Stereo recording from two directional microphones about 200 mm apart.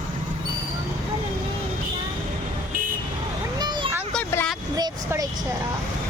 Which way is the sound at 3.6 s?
20° right (ahead or behind).